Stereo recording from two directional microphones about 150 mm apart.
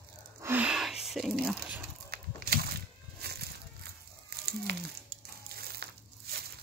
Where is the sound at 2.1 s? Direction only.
90° right.